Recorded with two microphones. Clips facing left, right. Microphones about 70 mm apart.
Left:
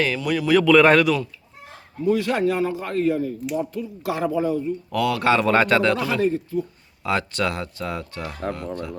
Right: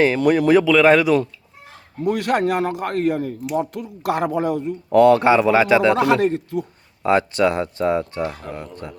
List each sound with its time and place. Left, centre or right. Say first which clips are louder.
0.2 s speech: right 7 dB; right
0.6 s a man's voice: right 1 dB; centre
2.0 s a man's voice: right 1 dB; right
4.9 s speech: right 12 dB; right
5.2 s speech: right 4 dB; centre
5.5 s a man's voice: right 3 dB; centre
6.0 s a man's voice: right 5 dB; right
7.0 s speech: right 7 dB; right